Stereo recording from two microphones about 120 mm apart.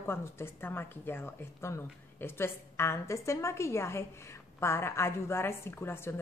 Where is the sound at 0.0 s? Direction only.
20° left (ahead or behind).